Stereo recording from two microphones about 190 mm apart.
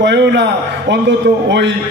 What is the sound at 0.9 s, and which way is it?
Speech, 65° right (ahead or behind).